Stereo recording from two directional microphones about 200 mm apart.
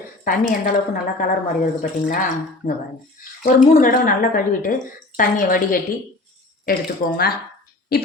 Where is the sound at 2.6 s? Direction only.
40° left (ahead or behind).